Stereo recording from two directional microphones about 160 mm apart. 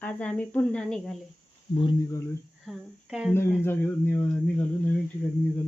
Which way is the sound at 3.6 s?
15° left (ahead or behind).